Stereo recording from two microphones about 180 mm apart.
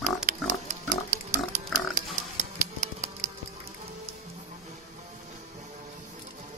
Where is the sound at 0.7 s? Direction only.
40° right (ahead or behind).